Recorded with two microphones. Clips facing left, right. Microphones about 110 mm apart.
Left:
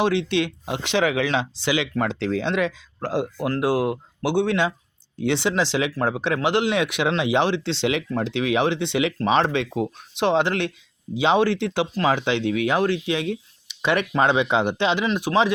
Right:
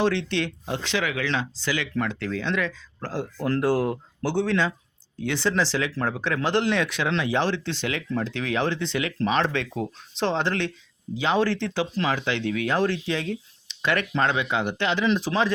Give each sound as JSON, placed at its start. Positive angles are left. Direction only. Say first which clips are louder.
{"t": 0.0, "sound": "speech", "louder": "left 3 dB", "side_deg": 15}
{"t": 15.3, "sound": "speech", "louder": "left 5 dB", "side_deg": 5}